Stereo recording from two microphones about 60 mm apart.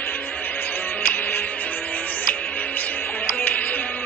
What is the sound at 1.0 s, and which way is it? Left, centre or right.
Music, left.